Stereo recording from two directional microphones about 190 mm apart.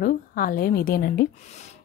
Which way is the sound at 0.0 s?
50° left (ahead or behind).